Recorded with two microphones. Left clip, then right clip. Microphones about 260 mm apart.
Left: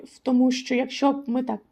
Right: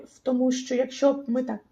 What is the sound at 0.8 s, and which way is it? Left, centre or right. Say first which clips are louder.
Speech: right 3 dB; left.